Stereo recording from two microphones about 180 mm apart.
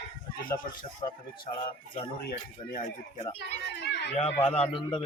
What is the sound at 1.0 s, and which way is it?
Speech, 25° left (ahead or behind).